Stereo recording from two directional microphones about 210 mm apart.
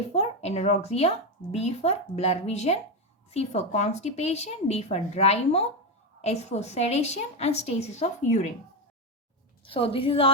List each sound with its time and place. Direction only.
0.1 s speech: 30° left (ahead or behind)
9.6 s a woman's voice: 25° left (ahead or behind)